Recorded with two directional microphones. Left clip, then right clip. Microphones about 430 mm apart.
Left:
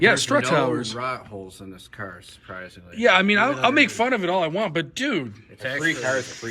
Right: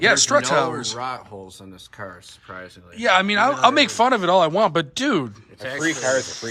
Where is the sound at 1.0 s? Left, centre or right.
Right.